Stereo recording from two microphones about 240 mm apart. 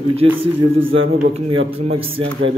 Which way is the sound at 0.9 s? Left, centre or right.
Right.